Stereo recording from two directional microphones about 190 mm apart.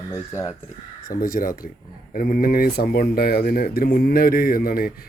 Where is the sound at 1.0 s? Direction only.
50° left (ahead or behind).